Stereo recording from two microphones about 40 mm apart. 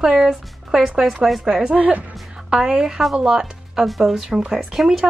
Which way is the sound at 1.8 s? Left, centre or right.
Right.